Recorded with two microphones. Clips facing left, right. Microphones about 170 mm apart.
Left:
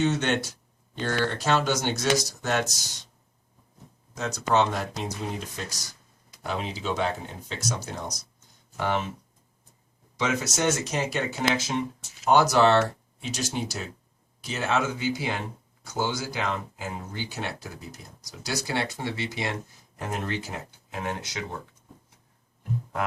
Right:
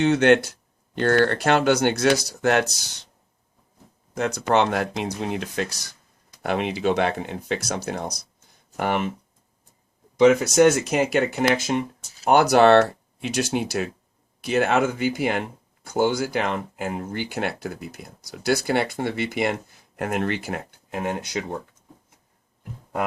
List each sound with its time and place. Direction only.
0.1 s speech: 60° right (ahead or behind)
4.1 s speech: 60° right (ahead or behind)
10.2 s speech: 65° right (ahead or behind)
12.3 s speech: 60° right (ahead or behind)